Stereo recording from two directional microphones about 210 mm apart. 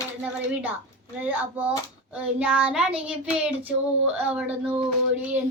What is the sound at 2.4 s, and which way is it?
Child singing, 5° right (ahead or behind).